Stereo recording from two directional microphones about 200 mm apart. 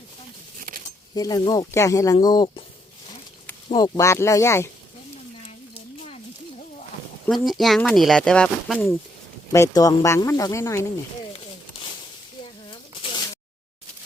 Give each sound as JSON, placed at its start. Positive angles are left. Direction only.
{"t": 1.1, "sound": "speech", "side_deg": 20}
{"t": 3.7, "sound": "speech", "side_deg": 20}
{"t": 7.4, "sound": "speech", "side_deg": 0}
{"t": 9.5, "sound": "speech", "side_deg": 15}
{"t": 12.7, "sound": "a sound", "side_deg": 25}